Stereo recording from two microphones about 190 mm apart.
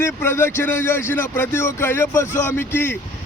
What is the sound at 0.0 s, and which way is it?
Speech, 10° left (ahead or behind).